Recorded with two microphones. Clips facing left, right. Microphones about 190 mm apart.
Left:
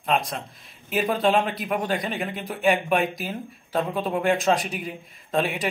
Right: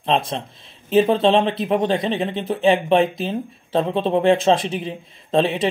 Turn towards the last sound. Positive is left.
turn(degrees=-25)  # may be behind; listen again after turning